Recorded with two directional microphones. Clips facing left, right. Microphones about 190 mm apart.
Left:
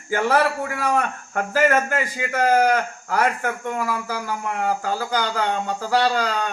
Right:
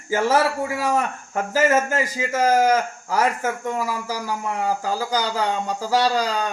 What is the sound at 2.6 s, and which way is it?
A man's voice, centre (ahead or behind).